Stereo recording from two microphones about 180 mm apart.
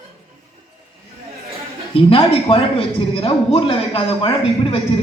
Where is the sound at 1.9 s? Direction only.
30° left (ahead or behind).